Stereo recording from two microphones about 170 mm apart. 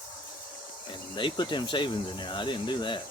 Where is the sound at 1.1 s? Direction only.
25° left (ahead or behind).